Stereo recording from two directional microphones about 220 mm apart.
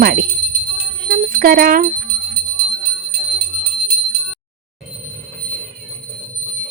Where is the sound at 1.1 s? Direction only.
40° right (ahead or behind).